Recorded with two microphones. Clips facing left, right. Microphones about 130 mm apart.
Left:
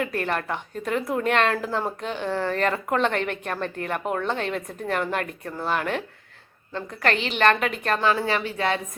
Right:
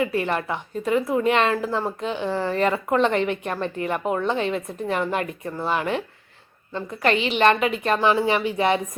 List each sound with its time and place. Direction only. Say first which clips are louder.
0.0 s a woman's voice: right 3 dB; 5° right (ahead or behind)
8.0 s speech: right 3 dB; 15° right (ahead or behind)